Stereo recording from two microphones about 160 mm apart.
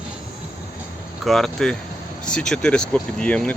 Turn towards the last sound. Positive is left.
turn(degrees=5)  # may be behind; listen again after turning